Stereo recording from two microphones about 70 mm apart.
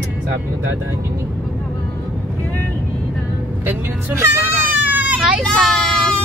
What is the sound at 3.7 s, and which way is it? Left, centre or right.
Speech, right.